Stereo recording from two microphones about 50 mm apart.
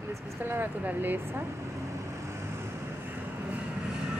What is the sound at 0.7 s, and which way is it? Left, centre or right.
Speech, right.